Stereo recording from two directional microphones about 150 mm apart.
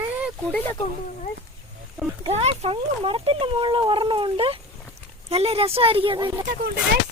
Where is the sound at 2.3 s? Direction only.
45° right (ahead or behind).